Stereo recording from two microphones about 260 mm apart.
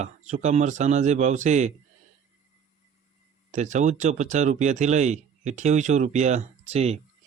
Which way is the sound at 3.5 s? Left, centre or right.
Right.